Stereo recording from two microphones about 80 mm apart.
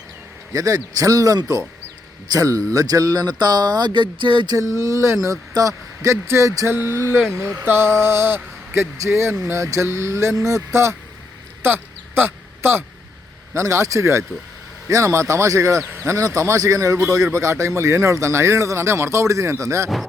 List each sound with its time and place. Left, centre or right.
0.5 s speech: right
4.5 s speech: right
6.7 s speech: right
11.6 s a sound: right
13.5 s speech: right